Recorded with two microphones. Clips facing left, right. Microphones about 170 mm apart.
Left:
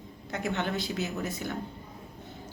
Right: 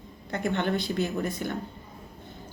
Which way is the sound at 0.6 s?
55° right (ahead or behind).